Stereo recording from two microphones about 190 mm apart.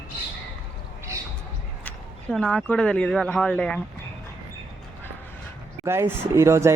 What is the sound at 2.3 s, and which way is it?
Speech, centre (ahead or behind).